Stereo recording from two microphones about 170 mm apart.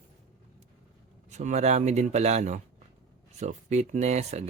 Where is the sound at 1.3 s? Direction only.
45° right (ahead or behind).